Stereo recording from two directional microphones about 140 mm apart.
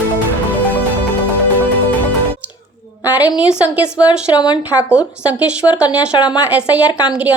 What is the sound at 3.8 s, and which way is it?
Speech, 30° left (ahead or behind).